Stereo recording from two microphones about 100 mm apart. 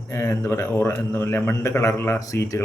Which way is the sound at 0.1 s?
30° left (ahead or behind).